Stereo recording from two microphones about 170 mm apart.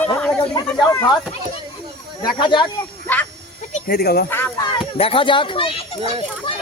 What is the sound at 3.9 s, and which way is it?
Speech, 65° left (ahead or behind).